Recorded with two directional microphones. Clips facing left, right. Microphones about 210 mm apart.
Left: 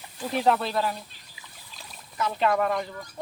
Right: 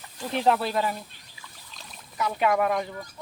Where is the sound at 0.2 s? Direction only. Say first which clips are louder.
Even; centre (ahead or behind).